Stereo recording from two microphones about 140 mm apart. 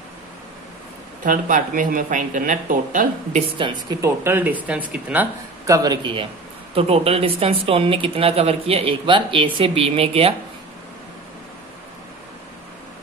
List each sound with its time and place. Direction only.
1.2 s speech: 75° right (ahead or behind)
3.3 s a woman's voice: 35° right (ahead or behind)
4.0 s speech: 15° right (ahead or behind)
5.7 s a man's voice: 30° right (ahead or behind)
6.7 s speech: 45° right (ahead or behind)